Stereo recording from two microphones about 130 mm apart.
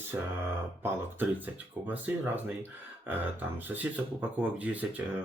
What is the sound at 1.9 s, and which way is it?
Speech, 15° right (ahead or behind).